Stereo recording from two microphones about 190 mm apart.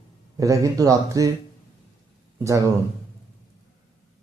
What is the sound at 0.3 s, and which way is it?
Speech, 15° right (ahead or behind).